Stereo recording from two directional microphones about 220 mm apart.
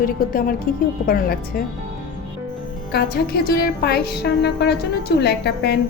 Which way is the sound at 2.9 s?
45° left (ahead or behind).